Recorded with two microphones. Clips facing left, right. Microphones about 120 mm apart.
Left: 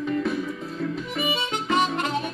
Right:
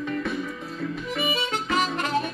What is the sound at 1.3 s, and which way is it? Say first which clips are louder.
Harmonica: left 3 dB; 25° left (ahead or behind).